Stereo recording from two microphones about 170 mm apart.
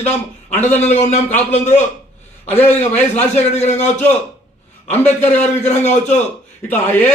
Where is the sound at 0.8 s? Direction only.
40° left (ahead or behind).